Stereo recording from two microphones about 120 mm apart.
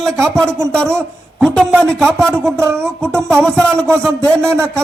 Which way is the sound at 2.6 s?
20° right (ahead or behind).